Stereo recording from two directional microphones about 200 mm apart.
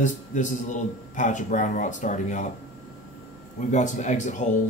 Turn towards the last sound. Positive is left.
turn(degrees=40)  # may be behind; listen again after turning